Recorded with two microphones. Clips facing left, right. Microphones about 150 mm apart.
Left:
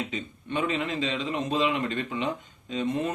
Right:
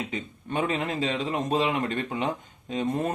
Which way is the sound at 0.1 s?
45° right (ahead or behind).